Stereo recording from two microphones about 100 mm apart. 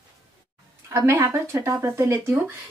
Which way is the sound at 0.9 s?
30° right (ahead or behind).